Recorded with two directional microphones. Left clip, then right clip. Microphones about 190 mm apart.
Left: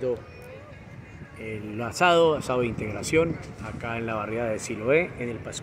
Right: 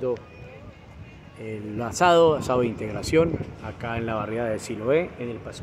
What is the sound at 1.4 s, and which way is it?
Speech, 15° right (ahead or behind).